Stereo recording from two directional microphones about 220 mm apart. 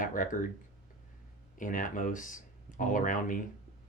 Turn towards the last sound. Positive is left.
turn(degrees=35)  # may be behind; listen again after turning